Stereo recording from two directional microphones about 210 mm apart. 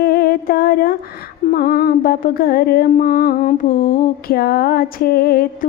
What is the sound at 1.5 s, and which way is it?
Mantra, 45° left (ahead or behind).